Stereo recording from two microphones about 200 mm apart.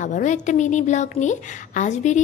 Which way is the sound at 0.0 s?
40° left (ahead or behind).